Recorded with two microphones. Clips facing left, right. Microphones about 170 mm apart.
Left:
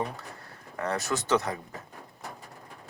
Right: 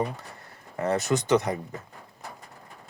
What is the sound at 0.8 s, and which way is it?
Speech, 20° right (ahead or behind).